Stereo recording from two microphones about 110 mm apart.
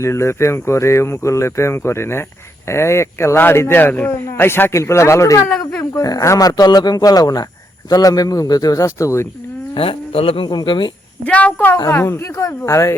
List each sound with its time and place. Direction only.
0.0 s speech: 25° left (ahead or behind)
9.7 s speech: 55° left (ahead or behind)
11.3 s speech: 10° left (ahead or behind)